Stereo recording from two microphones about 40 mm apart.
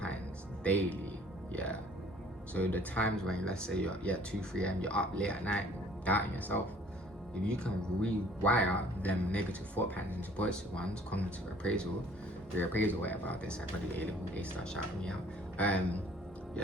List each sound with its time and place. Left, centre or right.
0.6 s speech: left
2.5 s speech: left
3.2 s speech: centre
4.3 s speech: left
6.1 s speech: left
7.4 s speech: left
8.4 s speech: left
12.5 s speech: left
14.6 s speech: left
15.5 s speech: left